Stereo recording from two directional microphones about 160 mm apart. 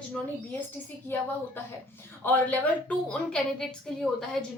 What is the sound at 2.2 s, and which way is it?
A woman's voice, 10° left (ahead or behind).